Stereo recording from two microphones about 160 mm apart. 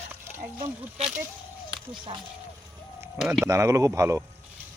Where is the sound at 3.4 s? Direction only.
20° right (ahead or behind).